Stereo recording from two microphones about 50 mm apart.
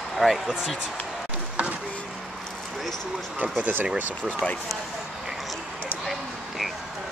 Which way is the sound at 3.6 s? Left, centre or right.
Right.